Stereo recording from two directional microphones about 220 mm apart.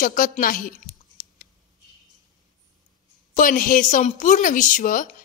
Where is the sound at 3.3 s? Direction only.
35° left (ahead or behind).